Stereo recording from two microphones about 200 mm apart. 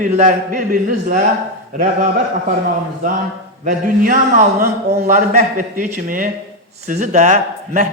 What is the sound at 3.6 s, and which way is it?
A man's voice, 40° right (ahead or behind).